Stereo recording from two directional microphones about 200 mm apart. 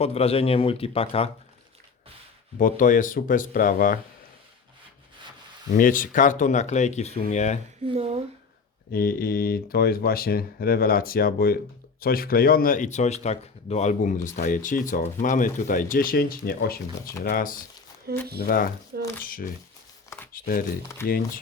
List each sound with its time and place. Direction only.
0.0 s speech: 30° left (ahead or behind)
2.6 s speech: 40° left (ahead or behind)
5.7 s speech: 45° left (ahead or behind)
7.9 s speech: 30° right (ahead or behind)
8.9 s speech: 45° left (ahead or behind)
18.1 s speech: 50° right (ahead or behind)
18.4 s speech: 45° left (ahead or behind)
21.0 s speech: 10° left (ahead or behind)